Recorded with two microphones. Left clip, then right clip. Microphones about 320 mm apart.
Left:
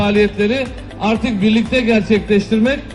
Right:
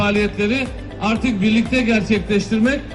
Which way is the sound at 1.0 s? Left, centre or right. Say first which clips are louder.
Left 3 dB; left.